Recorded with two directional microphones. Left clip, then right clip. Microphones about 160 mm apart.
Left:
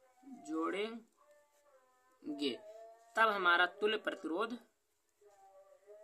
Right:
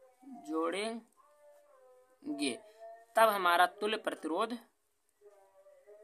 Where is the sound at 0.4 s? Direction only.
35° right (ahead or behind).